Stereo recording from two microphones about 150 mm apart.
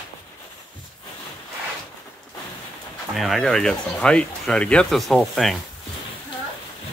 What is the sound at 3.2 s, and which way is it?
Speech, centre (ahead or behind).